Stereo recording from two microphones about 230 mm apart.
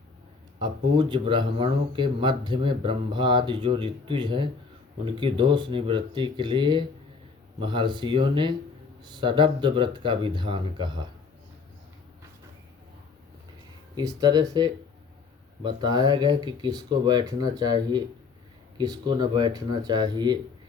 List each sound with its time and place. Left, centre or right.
0.6 s speech: right
13.9 s speech: centre